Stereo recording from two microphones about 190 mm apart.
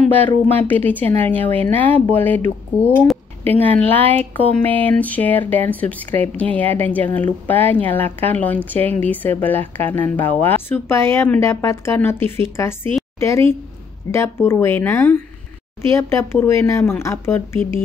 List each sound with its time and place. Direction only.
0.5 s speech: 10° left (ahead or behind)